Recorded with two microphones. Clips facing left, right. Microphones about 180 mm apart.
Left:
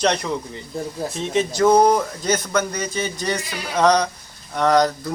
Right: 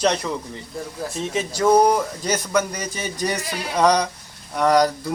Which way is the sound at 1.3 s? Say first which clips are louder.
Left 2 dB; 5° right (ahead or behind).